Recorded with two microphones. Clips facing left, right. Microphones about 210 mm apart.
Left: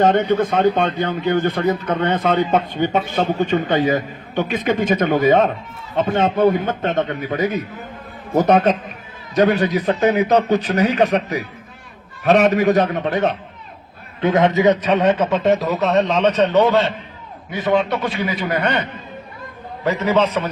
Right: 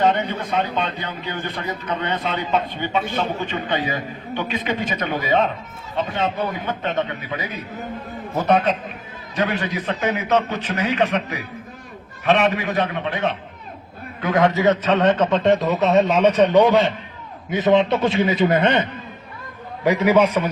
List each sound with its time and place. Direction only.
0.0 s a man's voice: 50° left (ahead or behind)
14.2 s a man's voice: 25° left (ahead or behind); by 20.5 s 10° right (ahead or behind)